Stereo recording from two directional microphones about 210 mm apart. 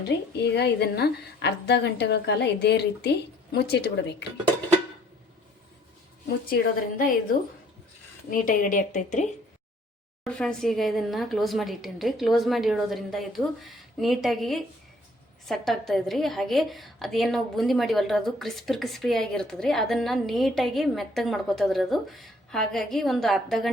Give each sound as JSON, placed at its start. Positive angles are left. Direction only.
{"t": 0.5, "sound": "a woman's voice", "side_deg": 50}
{"t": 6.5, "sound": "a woman's voice", "side_deg": 40}
{"t": 8.3, "sound": "a woman's voice", "side_deg": 40}
{"t": 10.2, "sound": "a woman's voice", "side_deg": 5}